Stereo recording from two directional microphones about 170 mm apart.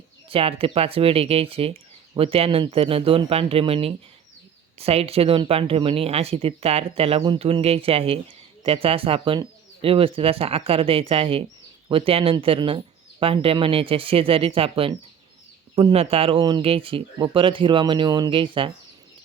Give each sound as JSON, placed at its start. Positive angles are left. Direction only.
{"t": 0.3, "sound": "speech", "side_deg": -35}